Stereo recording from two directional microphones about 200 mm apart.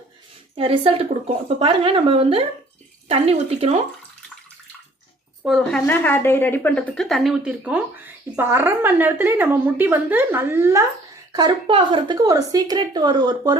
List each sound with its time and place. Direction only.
0.5 s speech: 30° right (ahead or behind)
5.4 s a woman's voice: centre (ahead or behind); by 13.6 s 20° right (ahead or behind)